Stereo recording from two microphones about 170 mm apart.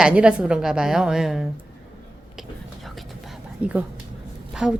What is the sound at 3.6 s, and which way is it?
A woman's voice, 5° right (ahead or behind).